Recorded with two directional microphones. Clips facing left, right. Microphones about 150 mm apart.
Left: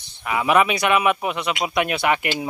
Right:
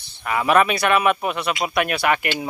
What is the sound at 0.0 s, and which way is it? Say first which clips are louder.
Speech: right 1 dB; 15° left (ahead or behind).